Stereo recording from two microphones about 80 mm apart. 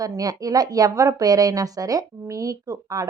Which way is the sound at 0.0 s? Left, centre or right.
Right.